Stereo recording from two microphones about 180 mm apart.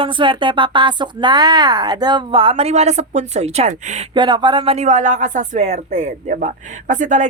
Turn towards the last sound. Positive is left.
turn(degrees=-45)  # may be behind; listen again after turning